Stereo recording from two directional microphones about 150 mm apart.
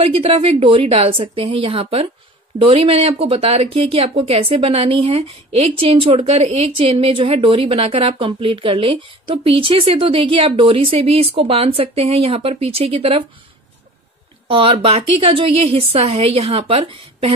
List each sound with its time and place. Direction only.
0.0 s speech: 40° right (ahead or behind)
14.5 s speech: 35° right (ahead or behind)